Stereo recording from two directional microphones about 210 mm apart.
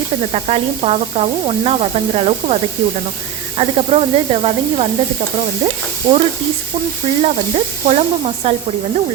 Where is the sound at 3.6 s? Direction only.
30° right (ahead or behind).